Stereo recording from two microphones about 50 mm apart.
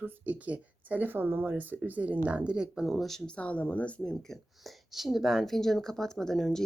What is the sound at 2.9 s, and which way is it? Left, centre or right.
Speech, centre.